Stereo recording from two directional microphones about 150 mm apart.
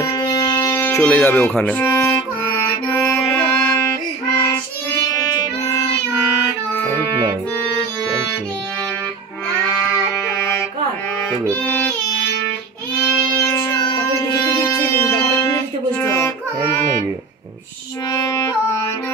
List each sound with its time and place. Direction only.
0.9 s music: 10° left (ahead or behind)
9.6 s livestock: 15° left (ahead or behind)
13.4 s music: 15° left (ahead or behind)
16.0 s music: 15° left (ahead or behind)
18.1 s music: 20° left (ahead or behind)